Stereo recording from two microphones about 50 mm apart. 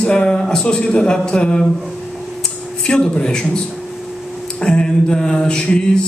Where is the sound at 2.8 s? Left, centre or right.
Centre.